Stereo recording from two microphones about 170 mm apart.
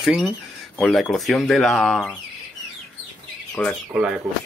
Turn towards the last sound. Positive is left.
turn(degrees=-5)  # may be behind; listen again after turning